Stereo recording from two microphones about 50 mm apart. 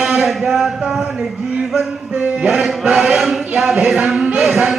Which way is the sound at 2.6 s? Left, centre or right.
Centre.